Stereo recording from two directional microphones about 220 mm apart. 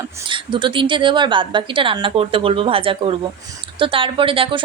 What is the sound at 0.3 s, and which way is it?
A woman's voice, 20° right (ahead or behind).